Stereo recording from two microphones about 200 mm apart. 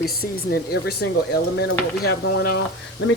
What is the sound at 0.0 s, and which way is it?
Speech, 50° left (ahead or behind).